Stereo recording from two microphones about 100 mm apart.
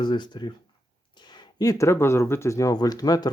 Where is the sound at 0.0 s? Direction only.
50° left (ahead or behind).